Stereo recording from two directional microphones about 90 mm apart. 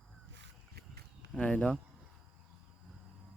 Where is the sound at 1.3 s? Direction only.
15° left (ahead or behind).